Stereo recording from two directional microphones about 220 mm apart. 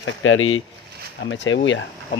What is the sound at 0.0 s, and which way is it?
Speech, 65° left (ahead or behind).